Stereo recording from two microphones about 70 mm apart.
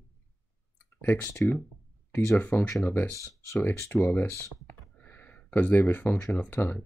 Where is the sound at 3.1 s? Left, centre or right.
Left.